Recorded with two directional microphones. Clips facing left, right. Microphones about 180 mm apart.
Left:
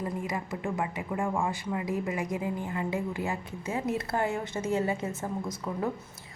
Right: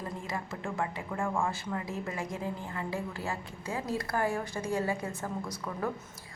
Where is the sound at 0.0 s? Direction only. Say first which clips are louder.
Left 4 dB; 15° left (ahead or behind).